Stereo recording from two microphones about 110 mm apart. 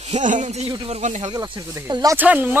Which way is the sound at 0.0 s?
85° right.